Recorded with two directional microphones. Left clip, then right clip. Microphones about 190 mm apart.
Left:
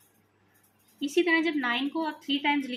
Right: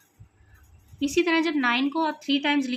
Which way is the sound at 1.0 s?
30° right (ahead or behind).